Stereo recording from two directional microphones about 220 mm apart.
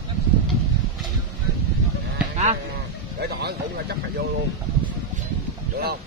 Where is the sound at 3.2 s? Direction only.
45° right (ahead or behind).